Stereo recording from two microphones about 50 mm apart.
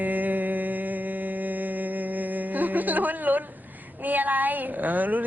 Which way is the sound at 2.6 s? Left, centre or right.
Right.